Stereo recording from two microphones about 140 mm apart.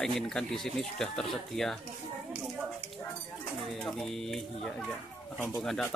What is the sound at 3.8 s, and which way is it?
Speech, 5° left (ahead or behind).